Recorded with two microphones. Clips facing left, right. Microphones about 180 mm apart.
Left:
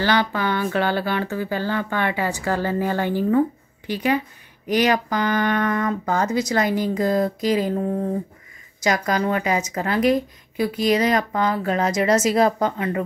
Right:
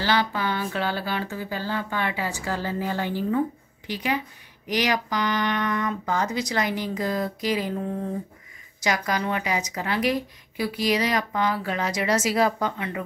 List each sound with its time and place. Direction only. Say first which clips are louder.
0.0 s speech: left 3 dB; 55° left (ahead or behind)
8.8 s speech: left 5 dB; 45° left (ahead or behind)